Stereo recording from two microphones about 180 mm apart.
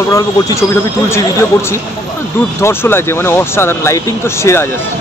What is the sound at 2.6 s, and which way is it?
Speech, 15° left (ahead or behind).